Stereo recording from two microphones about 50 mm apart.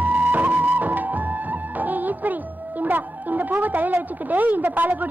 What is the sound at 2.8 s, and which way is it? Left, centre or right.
A woman's voice, right.